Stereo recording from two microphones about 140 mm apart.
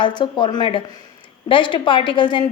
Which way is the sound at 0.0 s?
35° left (ahead or behind).